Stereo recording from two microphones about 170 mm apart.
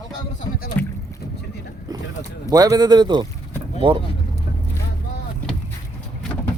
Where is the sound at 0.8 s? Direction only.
10° left (ahead or behind).